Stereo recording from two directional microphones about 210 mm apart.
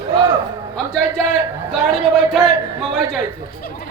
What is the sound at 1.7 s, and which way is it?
Speech, centre (ahead or behind).